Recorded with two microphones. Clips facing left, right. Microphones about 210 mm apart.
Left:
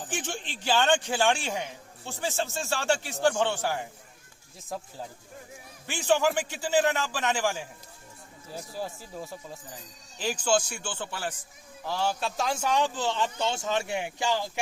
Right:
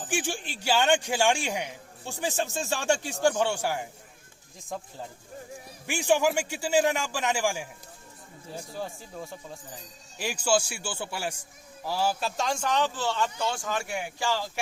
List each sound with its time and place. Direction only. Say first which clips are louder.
0.1 s a man's voice: right 5 dB; 10° right (ahead or behind)
4.7 s speech: even; 5° left (ahead or behind)
5.8 s a man's voice: right 1 dB; 10° right (ahead or behind)
8.7 s speech: left 1 dB; 5° left (ahead or behind)
10.2 s a man's voice: even; 10° right (ahead or behind); by 14.6 s 15° left (ahead or behind)